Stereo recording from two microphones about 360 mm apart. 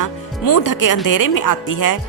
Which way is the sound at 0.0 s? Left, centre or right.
Left.